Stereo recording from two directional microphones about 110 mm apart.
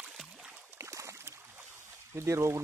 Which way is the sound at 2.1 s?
25° right (ahead or behind).